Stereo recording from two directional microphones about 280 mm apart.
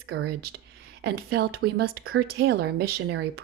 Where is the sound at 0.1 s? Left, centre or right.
Right.